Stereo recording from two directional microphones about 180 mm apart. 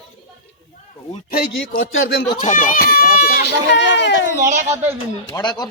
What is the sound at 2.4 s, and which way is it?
Speech, 45° left (ahead or behind).